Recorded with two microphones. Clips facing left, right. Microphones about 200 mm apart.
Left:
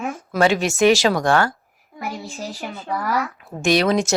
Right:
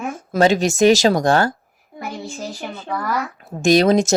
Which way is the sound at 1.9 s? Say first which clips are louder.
Even; 30° right (ahead or behind).